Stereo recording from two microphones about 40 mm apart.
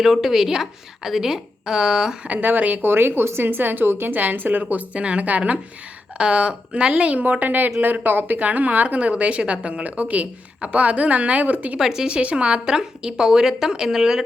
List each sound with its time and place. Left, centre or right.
0.0 s a woman's voice: centre
2.2 s a woman's voice: right
2.8 s a woman's voice: right
10.0 s a woman's voice: right
11.8 s a woman's voice: centre
12.0 s speech: right
12.6 s a woman's voice: centre